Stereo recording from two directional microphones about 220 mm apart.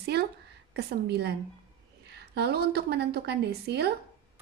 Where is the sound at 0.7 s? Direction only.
50° right (ahead or behind).